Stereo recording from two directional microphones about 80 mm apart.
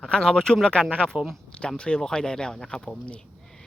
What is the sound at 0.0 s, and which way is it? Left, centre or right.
Speech, centre.